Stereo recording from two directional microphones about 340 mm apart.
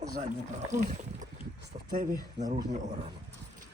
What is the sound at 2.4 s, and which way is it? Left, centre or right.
Speech, centre.